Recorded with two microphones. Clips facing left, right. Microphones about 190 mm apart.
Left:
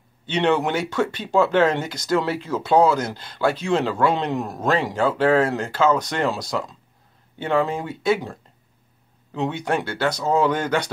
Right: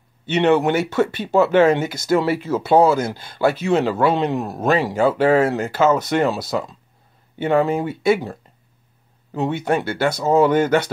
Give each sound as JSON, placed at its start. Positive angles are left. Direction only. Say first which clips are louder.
{"t": 0.3, "sound": "speech", "louder": "right 4 dB", "side_deg": -5}